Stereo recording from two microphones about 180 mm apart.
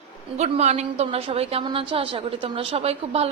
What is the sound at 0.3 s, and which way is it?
A woman's voice, 35° right (ahead or behind).